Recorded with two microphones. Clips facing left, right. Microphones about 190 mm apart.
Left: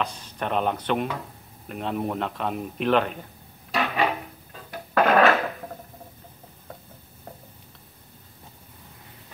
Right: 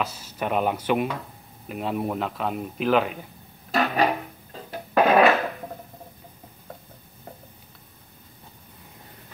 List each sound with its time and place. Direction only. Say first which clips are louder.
0.0 s a man's voice: right 1 dB; 5° right (ahead or behind)
3.7 s music: right 2 dB; 40° right (ahead or behind)
4.9 s fart: right 1 dB; 15° right (ahead or behind)